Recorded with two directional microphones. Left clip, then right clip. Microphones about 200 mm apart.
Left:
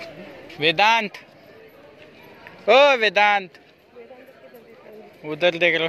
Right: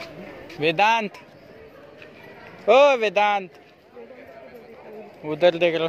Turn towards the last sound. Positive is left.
turn(degrees=-5)  # may be behind; listen again after turning